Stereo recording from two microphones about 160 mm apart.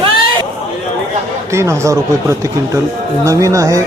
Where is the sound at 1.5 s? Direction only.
20° right (ahead or behind).